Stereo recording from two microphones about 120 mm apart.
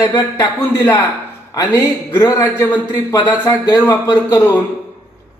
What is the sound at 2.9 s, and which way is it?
Speech, 35° left (ahead or behind).